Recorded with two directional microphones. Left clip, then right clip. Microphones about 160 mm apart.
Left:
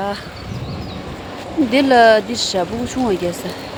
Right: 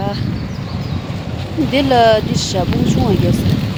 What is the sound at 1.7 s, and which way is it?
Speech, centre (ahead or behind).